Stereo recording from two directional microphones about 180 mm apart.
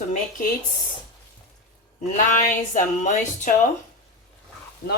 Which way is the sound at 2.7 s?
45° left (ahead or behind).